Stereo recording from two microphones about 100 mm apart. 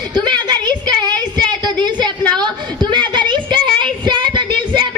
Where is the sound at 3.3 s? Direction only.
50° right (ahead or behind).